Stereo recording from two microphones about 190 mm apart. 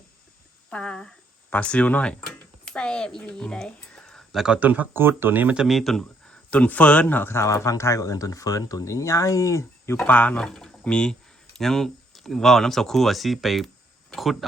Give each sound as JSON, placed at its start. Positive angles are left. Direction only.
{"t": 0.7, "sound": "speech", "side_deg": 5}